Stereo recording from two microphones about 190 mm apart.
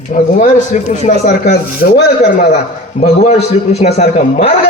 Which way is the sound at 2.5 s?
35° left (ahead or behind).